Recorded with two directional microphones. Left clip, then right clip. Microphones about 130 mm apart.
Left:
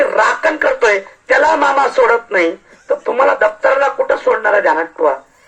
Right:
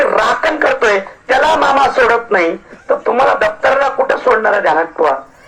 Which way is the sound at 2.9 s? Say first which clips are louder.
Right 1 dB; 30° left (ahead or behind).